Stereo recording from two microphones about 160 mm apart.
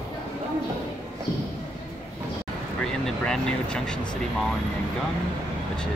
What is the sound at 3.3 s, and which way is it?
Speech, 5° left (ahead or behind).